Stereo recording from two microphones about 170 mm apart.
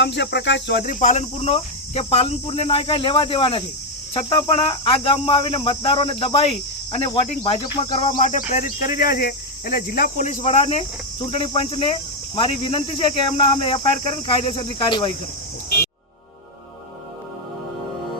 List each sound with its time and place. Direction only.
0.0 s cricket: 90° left; by 8.2 s 30° left (ahead or behind)
8.2 s speech: 45° left (ahead or behind); by 15.1 s 30° left (ahead or behind)